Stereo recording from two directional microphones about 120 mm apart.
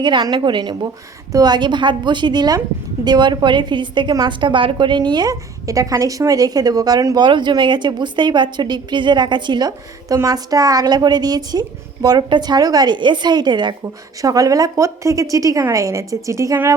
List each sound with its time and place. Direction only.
0.0 s a woman's voice: 40° right (ahead or behind)